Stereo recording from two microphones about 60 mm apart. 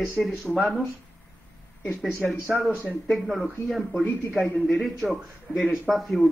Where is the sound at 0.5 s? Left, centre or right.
Centre.